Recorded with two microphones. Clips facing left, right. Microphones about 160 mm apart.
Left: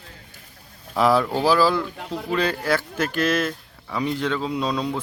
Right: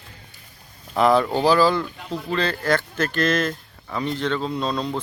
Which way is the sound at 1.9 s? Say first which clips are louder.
Even; 55° left (ahead or behind).